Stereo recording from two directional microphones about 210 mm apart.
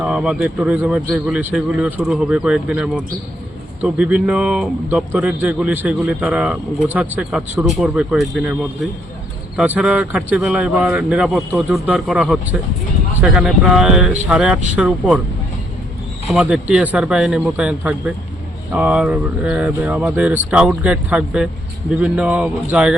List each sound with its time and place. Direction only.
0.0 s a man's voice: 5° right (ahead or behind)
9.6 s a man's voice: 5° right (ahead or behind)
16.3 s a man's voice: 5° right (ahead or behind)